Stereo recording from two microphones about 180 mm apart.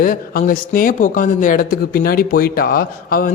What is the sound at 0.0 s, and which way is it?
Speech, 50° left (ahead or behind).